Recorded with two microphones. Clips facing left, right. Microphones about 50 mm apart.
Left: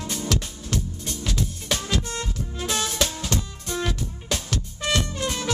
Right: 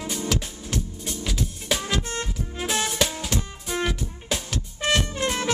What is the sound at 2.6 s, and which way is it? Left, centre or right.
Music, centre.